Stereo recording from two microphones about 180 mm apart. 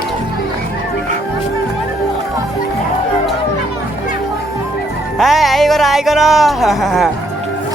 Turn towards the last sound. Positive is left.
turn(degrees=0)  # may be behind; listen again after turning